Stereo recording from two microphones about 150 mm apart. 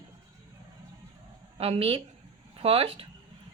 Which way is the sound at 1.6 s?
40° right (ahead or behind).